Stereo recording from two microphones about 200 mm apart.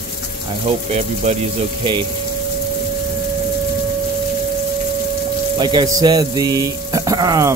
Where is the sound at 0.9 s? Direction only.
35° right (ahead or behind).